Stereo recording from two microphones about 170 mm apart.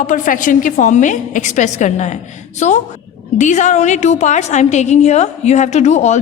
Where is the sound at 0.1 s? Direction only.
50° left (ahead or behind).